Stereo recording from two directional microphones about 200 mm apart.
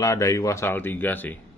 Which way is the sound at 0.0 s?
15° left (ahead or behind).